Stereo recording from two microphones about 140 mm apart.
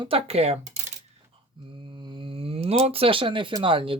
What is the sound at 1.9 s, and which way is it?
Speech, 35° right (ahead or behind).